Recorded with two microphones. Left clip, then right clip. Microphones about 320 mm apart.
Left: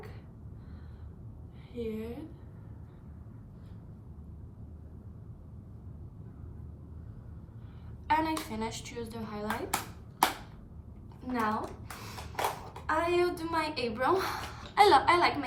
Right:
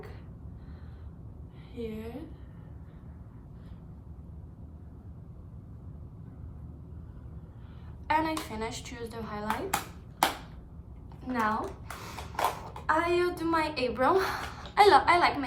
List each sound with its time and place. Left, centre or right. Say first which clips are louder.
1.7 s a woman's voice: left 1 dB; centre
8.0 s a woman's voice: right 1 dB; centre
11.2 s speech: right 2 dB; centre
12.9 s a woman's voice: right 2 dB; centre